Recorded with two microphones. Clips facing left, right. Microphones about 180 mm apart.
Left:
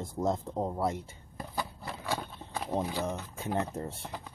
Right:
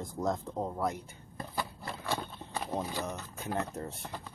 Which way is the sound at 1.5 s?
Centre (ahead or behind).